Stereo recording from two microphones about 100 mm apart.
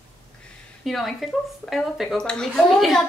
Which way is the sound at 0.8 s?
Centre (ahead or behind).